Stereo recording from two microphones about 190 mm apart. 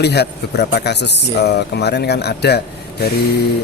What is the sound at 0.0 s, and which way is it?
Speech, 60° left (ahead or behind).